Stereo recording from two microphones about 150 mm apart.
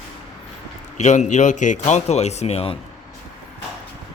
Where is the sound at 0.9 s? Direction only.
50° left (ahead or behind).